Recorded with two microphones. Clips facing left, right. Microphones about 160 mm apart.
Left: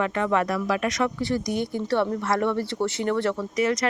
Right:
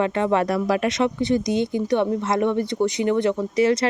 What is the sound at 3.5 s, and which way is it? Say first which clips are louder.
Speech: right 5 dB; 30° right (ahead or behind).